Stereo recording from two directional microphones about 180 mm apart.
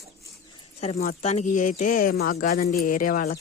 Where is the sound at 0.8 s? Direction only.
40° left (ahead or behind); by 2.4 s 55° left (ahead or behind).